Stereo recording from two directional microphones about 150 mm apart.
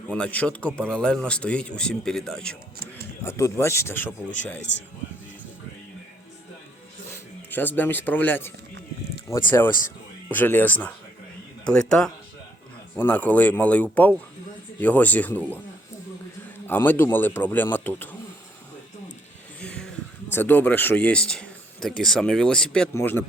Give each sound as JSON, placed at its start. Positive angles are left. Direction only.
{"t": 0.1, "sound": "speech", "side_deg": 10}
{"t": 3.2, "sound": "speech", "side_deg": 20}
{"t": 7.1, "sound": "speech", "side_deg": 10}
{"t": 16.6, "sound": "speech", "side_deg": 15}
{"t": 19.5, "sound": "a sound", "side_deg": 10}
{"t": 20.3, "sound": "speech", "side_deg": 10}